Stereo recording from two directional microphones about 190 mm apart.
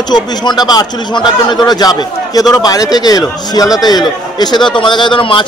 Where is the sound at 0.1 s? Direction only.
20° left (ahead or behind).